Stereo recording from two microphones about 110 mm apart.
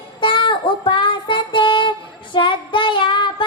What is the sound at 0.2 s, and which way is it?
Child singing, 50° left (ahead or behind).